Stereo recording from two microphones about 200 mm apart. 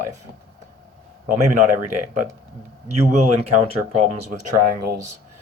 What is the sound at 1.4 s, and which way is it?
Speech, 35° right (ahead or behind).